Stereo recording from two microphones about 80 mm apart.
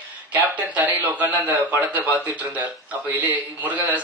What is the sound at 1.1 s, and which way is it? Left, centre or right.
Speech, right.